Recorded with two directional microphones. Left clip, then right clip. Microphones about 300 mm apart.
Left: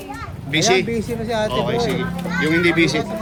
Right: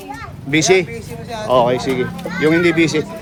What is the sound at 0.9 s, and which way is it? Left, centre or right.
Speech, left.